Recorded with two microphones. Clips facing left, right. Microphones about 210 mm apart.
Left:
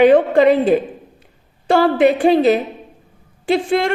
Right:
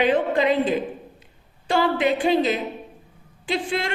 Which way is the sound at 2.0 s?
60° left (ahead or behind).